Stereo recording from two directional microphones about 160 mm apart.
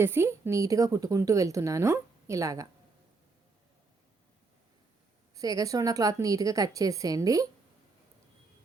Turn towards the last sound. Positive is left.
turn(degrees=-20)  # may be behind; listen again after turning